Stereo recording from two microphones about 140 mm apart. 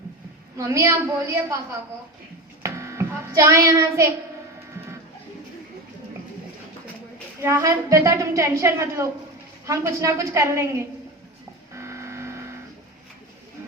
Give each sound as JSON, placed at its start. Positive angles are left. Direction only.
{"t": 0.5, "sound": "a woman's voice", "side_deg": -20}
{"t": 2.6, "sound": "a sound", "side_deg": -20}
{"t": 7.4, "sound": "a woman's voice", "side_deg": -20}
{"t": 11.7, "sound": "vehicle", "side_deg": -20}